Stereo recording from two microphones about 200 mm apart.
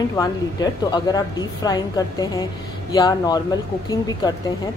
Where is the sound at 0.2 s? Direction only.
20° left (ahead or behind).